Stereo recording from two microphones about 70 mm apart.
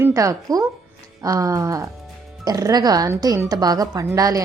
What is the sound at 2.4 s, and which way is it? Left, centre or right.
Speech, right.